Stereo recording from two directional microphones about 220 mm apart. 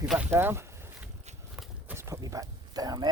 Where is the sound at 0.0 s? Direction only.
5° right (ahead or behind).